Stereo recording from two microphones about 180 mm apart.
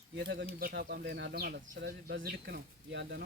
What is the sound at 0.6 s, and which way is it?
Speech, 60° right (ahead or behind).